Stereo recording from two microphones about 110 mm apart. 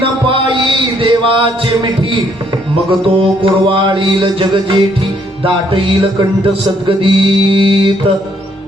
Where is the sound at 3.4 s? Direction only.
50° right (ahead or behind).